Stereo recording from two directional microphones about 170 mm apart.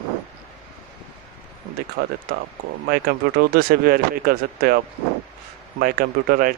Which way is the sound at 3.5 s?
60° right (ahead or behind).